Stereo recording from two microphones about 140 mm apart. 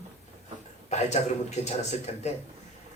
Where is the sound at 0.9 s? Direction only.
55° left (ahead or behind).